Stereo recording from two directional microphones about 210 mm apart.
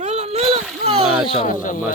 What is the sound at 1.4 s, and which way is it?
Speech, 40° left (ahead or behind).